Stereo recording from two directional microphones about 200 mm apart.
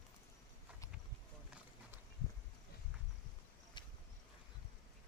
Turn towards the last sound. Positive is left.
turn(degrees=20)  # may be behind; listen again after turning